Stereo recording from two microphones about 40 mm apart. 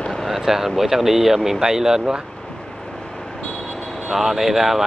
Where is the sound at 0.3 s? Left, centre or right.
Centre.